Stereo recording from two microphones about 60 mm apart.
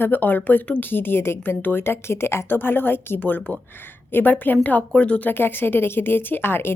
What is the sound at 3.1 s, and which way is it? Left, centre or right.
A woman's voice, left.